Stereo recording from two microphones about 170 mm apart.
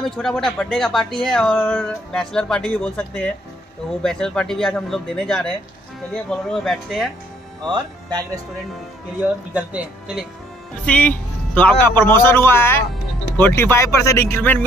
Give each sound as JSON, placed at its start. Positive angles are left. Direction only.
{"t": 0.1, "sound": "speech", "side_deg": 5}
{"t": 7.6, "sound": "speech", "side_deg": -25}
{"t": 9.5, "sound": "speech", "side_deg": -10}
{"t": 10.9, "sound": "a man's voice", "side_deg": 10}